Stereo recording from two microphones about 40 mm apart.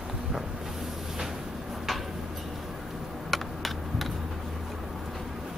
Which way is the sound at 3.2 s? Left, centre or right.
Centre.